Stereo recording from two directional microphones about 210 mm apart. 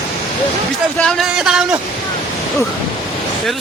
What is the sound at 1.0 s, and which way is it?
Speech, centre (ahead or behind).